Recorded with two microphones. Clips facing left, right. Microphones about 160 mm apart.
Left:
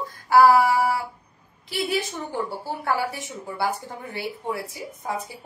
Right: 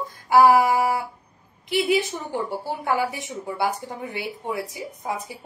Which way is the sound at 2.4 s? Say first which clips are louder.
Right 1 dB; 15° right (ahead or behind).